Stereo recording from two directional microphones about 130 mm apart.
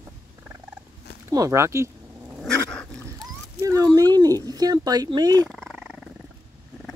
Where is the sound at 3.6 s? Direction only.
25° right (ahead or behind).